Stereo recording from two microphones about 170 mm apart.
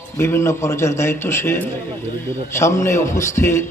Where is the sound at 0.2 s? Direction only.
15° left (ahead or behind).